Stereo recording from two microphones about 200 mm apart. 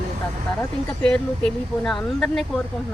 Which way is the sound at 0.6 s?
5° left (ahead or behind).